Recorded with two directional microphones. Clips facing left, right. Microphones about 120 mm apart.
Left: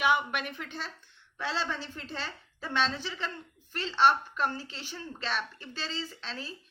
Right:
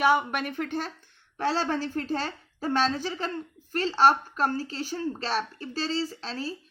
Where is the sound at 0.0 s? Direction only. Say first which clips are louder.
Right 4 dB; 40° right (ahead or behind).